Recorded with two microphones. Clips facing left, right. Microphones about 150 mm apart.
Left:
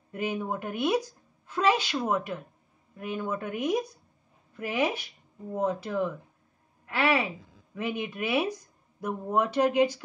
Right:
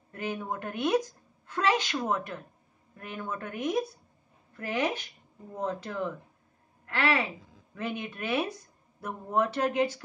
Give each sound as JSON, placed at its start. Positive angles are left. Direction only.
{"t": 0.1, "sound": "a woman's voice", "side_deg": 15}